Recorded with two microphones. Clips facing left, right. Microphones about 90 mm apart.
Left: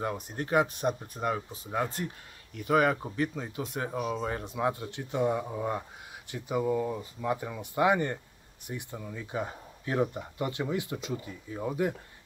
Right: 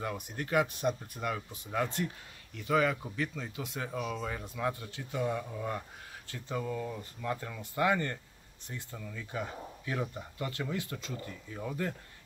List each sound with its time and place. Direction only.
0.0 s speech: 35° left (ahead or behind); by 12.0 s 20° left (ahead or behind)